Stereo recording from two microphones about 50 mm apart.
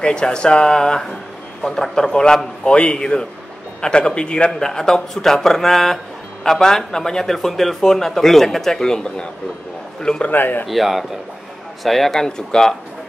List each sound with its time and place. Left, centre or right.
0.0 s a man's voice: centre
4.5 s a man's voice: centre
10.3 s speech: left
10.7 s a man's voice: centre